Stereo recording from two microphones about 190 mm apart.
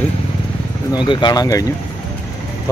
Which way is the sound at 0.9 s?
25° left (ahead or behind).